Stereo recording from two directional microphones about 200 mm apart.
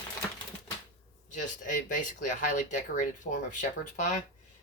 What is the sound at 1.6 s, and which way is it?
Speech, 40° left (ahead or behind).